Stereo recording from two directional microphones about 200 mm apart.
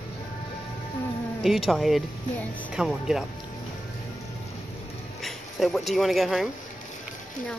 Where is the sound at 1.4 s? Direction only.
Centre (ahead or behind).